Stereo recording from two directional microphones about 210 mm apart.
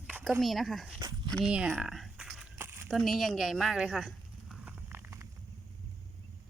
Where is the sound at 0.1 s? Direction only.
5° right (ahead or behind).